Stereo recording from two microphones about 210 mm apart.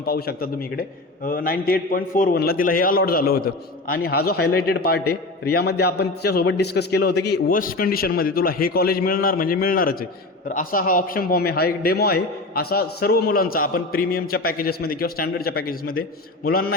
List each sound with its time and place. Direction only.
0.0 s a man's voice: 45° left (ahead or behind)